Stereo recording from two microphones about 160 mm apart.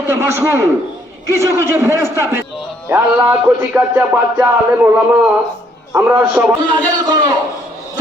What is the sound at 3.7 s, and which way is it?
Speech, 10° right (ahead or behind).